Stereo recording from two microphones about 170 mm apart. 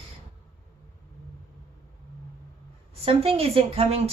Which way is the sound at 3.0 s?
35° right (ahead or behind).